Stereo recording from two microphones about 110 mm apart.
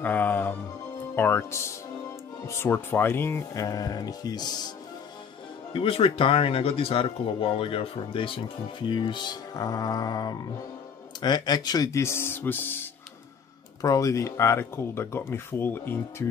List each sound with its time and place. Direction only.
0.0 s speech: 15° left (ahead or behind); by 4.7 s 40° left (ahead or behind)
5.7 s speech: 55° left (ahead or behind); by 12.8 s 20° left (ahead or behind)
13.7 s speech: 30° left (ahead or behind)